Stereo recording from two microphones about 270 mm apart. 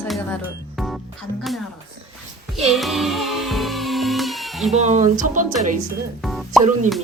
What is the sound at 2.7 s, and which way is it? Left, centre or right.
Music, centre.